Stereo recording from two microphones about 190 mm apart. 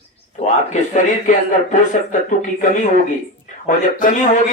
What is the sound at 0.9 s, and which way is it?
Speech, 40° left (ahead or behind).